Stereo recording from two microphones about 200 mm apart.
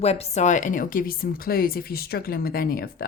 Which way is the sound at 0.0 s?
30° left (ahead or behind).